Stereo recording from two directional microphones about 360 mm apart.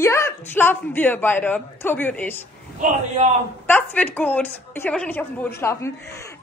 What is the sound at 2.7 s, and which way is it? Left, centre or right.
Speech, centre.